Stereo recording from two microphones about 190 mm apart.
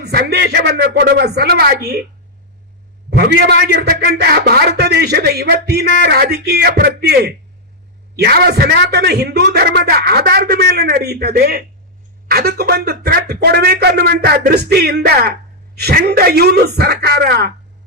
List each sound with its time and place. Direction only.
0.0 s a man's voice: 60° right (ahead or behind)
3.1 s a man's voice: 60° right (ahead or behind)